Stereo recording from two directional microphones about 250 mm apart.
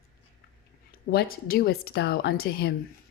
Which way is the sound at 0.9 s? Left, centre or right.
Left.